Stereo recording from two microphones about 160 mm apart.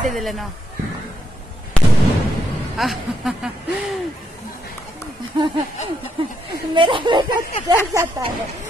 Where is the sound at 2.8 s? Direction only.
Centre (ahead or behind).